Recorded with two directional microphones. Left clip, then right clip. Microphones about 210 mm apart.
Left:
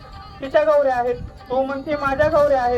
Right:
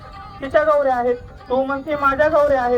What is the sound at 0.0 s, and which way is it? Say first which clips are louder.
Speech: right 2 dB; 20° left (ahead or behind).